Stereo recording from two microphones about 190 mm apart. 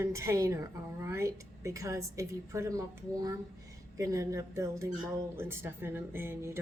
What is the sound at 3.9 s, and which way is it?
A woman's voice, 15° right (ahead or behind).